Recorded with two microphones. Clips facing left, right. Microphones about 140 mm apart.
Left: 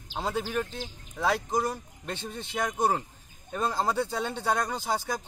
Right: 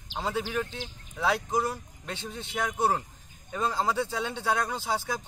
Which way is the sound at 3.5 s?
5° left (ahead or behind).